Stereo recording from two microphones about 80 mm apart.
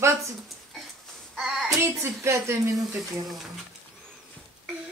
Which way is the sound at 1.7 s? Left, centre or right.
Right.